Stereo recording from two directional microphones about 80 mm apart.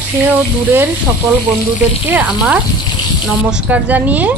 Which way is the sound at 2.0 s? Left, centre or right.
Centre.